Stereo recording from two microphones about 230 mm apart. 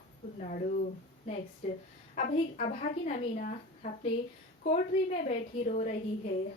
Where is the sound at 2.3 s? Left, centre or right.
Left.